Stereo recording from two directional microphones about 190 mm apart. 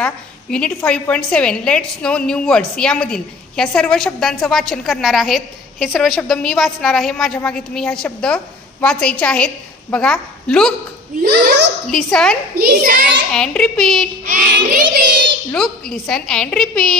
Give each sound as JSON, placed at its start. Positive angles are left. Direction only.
{"t": 0.0, "sound": "a woman's voice", "side_deg": 5}
{"t": 11.2, "sound": "a child's voice", "side_deg": -60}
{"t": 11.9, "sound": "a woman's voice", "side_deg": 5}
{"t": 12.5, "sound": "child singing", "side_deg": -50}
{"t": 13.3, "sound": "a woman's voice", "side_deg": 5}
{"t": 14.2, "sound": "child singing", "side_deg": -50}
{"t": 15.5, "sound": "a woman's voice", "side_deg": 5}